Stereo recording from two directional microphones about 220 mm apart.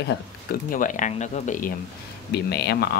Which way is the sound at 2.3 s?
45° left (ahead or behind).